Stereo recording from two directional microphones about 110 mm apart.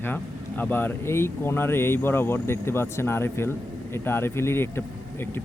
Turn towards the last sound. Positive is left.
turn(degrees=20)  # may be behind; listen again after turning